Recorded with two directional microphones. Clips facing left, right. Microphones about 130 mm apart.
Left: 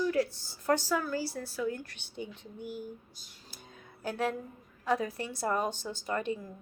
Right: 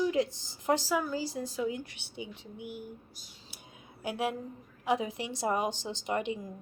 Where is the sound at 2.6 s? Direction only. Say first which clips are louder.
Left 2 dB; 60° right (ahead or behind).